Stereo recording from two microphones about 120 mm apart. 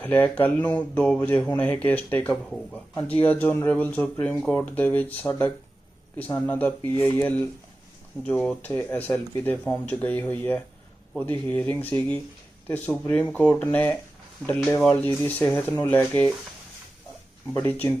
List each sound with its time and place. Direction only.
0.0 s speech: 15° left (ahead or behind)
17.5 s speech: 20° left (ahead or behind)